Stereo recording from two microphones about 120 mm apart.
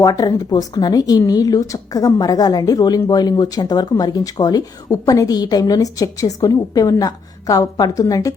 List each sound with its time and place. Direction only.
0.0 s speech: 30° left (ahead or behind)